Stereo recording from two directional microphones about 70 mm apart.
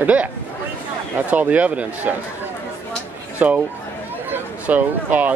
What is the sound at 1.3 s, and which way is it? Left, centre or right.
Speech, right.